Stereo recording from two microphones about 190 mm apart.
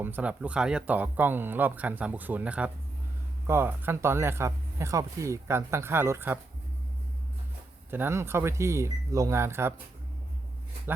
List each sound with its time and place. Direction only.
0.0 s speech: 10° right (ahead or behind)
7.9 s speech: 10° right (ahead or behind)